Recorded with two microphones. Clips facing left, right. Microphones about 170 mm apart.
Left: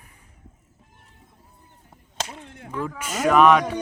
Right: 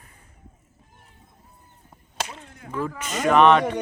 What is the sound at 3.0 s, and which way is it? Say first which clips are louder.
Speech: even; 5° left (ahead or behind).